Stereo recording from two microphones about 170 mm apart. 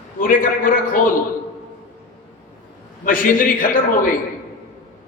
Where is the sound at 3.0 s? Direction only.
55° left (ahead or behind).